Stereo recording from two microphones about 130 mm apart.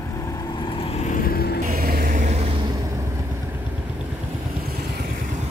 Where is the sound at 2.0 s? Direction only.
80° right; by 2.4 s 65° right (ahead or behind).